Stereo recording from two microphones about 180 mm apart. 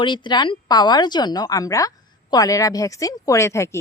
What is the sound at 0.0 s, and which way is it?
A woman's voice, 25° left (ahead or behind).